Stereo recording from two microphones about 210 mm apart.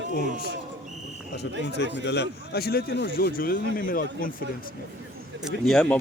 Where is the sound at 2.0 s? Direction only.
50° left (ahead or behind).